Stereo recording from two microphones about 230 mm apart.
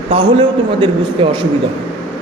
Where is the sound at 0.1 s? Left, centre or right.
Right.